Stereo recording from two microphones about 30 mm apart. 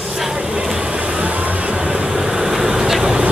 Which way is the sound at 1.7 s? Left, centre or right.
Right.